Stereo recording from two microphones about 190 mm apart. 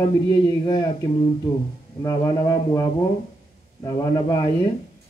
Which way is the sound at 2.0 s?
20° left (ahead or behind).